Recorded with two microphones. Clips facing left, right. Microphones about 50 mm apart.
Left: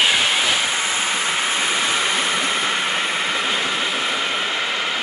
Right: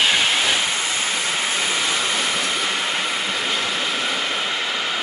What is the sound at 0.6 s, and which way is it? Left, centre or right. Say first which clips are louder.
Vehicle: left 2 dB; left.